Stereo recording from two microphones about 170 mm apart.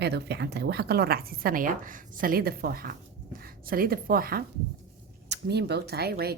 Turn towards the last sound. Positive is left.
turn(degrees=-65)  # may be behind; listen again after turning